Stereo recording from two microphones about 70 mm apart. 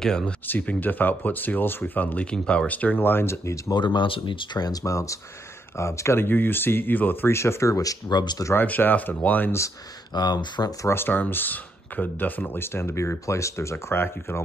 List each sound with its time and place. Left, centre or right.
0.5 s speech: left
3.7 s speech: left
4.6 s speech: left
4.9 s speech: left
8.5 s speech: left
10.1 s speech: left
10.8 s speech: left